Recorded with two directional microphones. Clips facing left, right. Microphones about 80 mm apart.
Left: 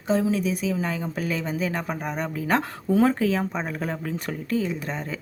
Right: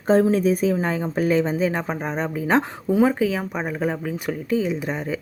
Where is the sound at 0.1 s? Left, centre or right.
Right.